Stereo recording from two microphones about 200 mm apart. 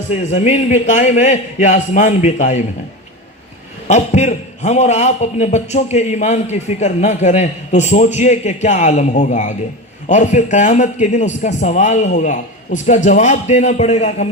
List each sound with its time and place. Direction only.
0.1 s a man's voice: 35° left (ahead or behind)
3.8 s a man's voice: 35° left (ahead or behind)